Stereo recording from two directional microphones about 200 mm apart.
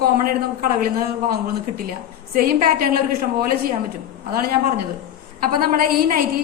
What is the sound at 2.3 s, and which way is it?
Speech, 45° right (ahead or behind).